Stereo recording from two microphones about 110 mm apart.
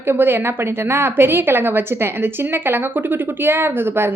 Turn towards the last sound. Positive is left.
turn(degrees=-20)  # may be behind; listen again after turning